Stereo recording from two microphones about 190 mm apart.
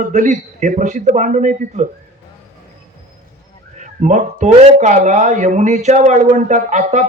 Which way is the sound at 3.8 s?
40° right (ahead or behind).